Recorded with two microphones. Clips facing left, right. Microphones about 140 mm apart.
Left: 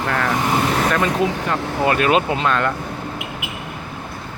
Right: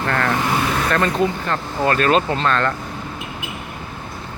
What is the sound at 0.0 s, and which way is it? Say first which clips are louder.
Speech: even; 5° left (ahead or behind).